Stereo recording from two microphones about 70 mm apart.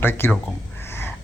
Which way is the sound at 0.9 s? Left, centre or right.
Left.